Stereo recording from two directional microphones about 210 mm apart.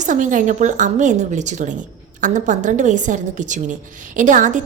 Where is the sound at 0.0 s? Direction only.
35° right (ahead or behind).